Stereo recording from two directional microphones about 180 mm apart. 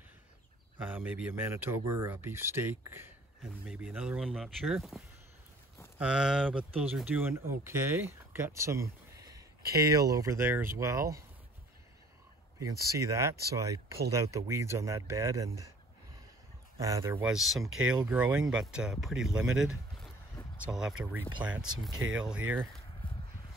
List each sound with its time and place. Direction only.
0.8 s speech: 10° right (ahead or behind)
12.5 s speech: 20° right (ahead or behind)
16.8 s speech: 15° right (ahead or behind)
20.6 s speech: 5° right (ahead or behind)